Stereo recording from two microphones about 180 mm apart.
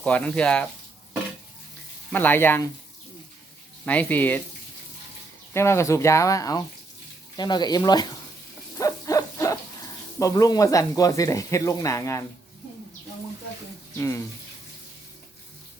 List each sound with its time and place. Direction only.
0.0 s speech: 5° left (ahead or behind)
2.1 s speech: 10° left (ahead or behind)
3.8 s speech: 10° left (ahead or behind)
5.5 s speech: 15° left (ahead or behind)
8.8 s hoot: 20° left (ahead or behind)
10.2 s speech: 20° left (ahead or behind)